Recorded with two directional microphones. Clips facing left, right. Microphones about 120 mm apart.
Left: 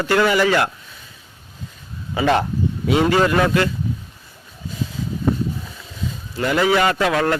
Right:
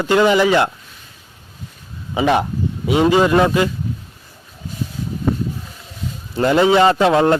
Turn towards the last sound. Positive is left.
turn(degrees=-25)  # may be behind; listen again after turning